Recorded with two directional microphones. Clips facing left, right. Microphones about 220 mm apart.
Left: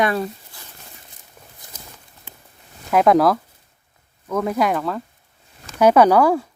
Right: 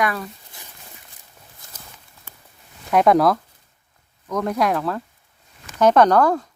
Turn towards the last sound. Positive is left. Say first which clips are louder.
# left 2 dB
turn(degrees=10)  # may be behind; listen again after turning